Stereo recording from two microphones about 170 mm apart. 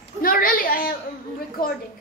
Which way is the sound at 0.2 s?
55° left (ahead or behind).